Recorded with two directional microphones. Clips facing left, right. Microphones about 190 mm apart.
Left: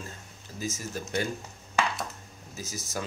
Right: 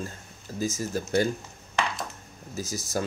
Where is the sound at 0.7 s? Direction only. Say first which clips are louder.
Right 8 dB; 35° right (ahead or behind).